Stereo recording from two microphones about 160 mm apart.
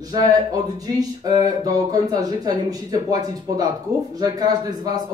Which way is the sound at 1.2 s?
25° right (ahead or behind).